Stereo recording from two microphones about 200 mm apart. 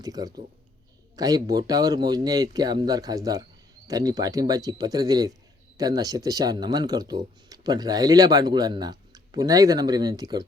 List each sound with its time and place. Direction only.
0.0 s speech: 20° right (ahead or behind)